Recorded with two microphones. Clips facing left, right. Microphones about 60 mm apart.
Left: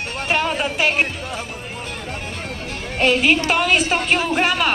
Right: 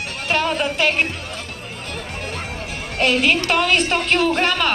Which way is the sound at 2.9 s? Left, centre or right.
Centre.